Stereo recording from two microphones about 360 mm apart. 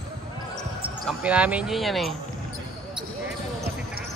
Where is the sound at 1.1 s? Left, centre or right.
Centre.